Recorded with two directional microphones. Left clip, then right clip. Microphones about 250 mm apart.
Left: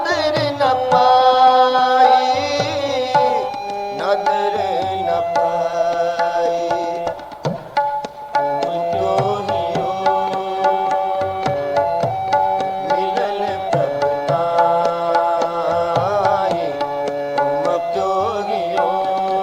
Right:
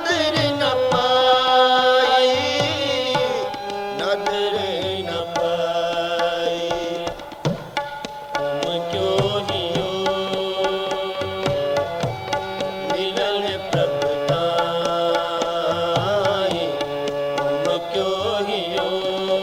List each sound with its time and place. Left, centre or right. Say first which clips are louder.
0.1 s music: right 1 dB; left
14.0 s music: left 3 dB; left
15.9 s carnatic music: left 3 dB; left